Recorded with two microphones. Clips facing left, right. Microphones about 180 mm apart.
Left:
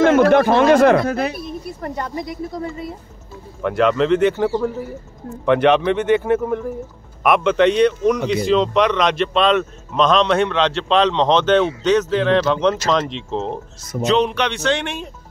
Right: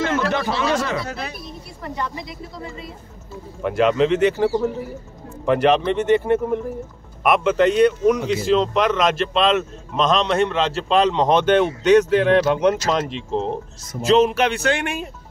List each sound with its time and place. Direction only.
0.0 s speech: 50° left (ahead or behind)
3.6 s speech: centre (ahead or behind)
14.5 s speech: 10° right (ahead or behind)